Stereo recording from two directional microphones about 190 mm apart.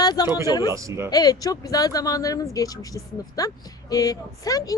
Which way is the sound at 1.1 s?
20° left (ahead or behind).